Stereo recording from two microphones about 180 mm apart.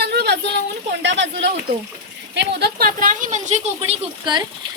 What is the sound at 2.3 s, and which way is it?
Speech, 65° right (ahead or behind).